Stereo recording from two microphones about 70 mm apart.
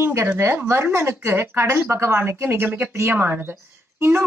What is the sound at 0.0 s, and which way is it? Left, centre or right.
A woman's voice, right.